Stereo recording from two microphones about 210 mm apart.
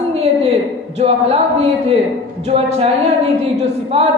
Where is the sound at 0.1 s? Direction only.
30° right (ahead or behind).